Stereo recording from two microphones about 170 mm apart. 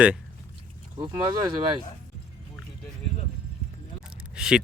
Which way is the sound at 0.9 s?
25° right (ahead or behind).